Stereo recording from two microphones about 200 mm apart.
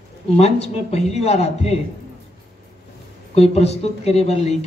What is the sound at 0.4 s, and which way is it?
Speech, 30° left (ahead or behind).